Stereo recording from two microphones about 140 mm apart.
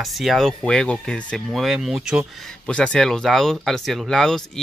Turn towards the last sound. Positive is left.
turn(degrees=5)  # may be behind; listen again after turning